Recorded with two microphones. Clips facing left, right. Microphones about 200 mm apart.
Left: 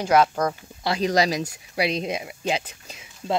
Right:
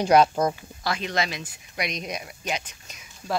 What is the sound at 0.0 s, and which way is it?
Speech, 20° right (ahead or behind).